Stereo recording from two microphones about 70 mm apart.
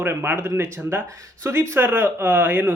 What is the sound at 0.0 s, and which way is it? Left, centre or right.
Speech, right.